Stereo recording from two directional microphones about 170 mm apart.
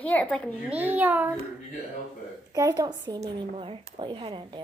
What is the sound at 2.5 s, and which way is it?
Speech, 20° right (ahead or behind).